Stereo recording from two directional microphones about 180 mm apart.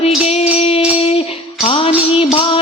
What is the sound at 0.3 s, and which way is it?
Music, 35° left (ahead or behind).